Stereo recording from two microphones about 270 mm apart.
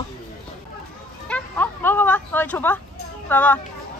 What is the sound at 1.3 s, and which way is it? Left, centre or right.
Speech, centre.